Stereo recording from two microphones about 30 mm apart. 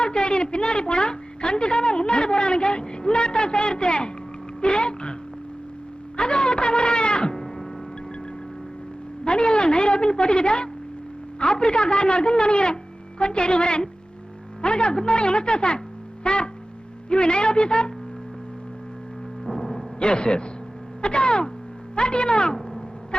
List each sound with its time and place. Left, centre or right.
0.0 s a woman's voice: left
6.1 s speech: left
9.2 s a woman's voice: left
16.2 s music: left
17.1 s a woman's voice: left
19.5 s music: centre
20.0 s a woman's voice: left